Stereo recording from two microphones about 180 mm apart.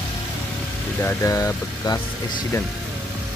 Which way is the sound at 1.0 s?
15° left (ahead or behind).